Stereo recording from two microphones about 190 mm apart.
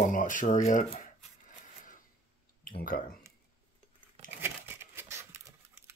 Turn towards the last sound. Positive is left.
turn(degrees=-15)  # may be behind; listen again after turning